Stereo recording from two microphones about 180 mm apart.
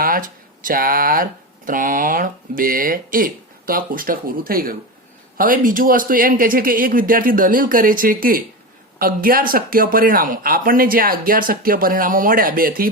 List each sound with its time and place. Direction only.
0.0 s speech: 50° right (ahead or behind)